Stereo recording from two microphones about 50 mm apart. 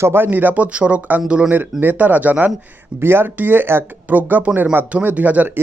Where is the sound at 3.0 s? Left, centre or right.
Right.